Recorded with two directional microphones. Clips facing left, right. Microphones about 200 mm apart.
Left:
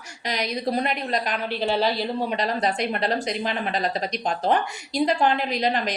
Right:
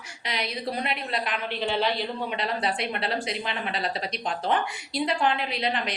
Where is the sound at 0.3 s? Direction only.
40° left (ahead or behind).